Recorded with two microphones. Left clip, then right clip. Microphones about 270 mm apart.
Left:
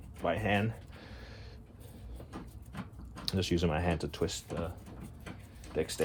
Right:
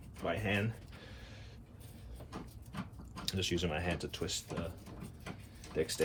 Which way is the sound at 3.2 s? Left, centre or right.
Left.